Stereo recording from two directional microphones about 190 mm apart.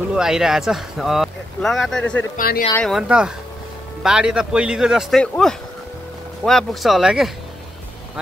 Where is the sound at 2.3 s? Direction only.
50° left (ahead or behind).